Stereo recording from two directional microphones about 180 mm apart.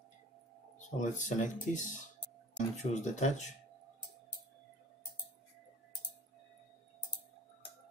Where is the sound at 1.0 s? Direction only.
45° left (ahead or behind).